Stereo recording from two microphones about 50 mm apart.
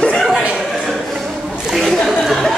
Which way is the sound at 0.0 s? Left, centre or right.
Centre.